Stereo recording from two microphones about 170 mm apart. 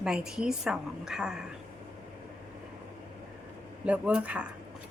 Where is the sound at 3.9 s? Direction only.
5° right (ahead or behind).